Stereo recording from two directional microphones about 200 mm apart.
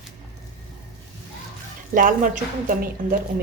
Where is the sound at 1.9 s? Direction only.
40° right (ahead or behind).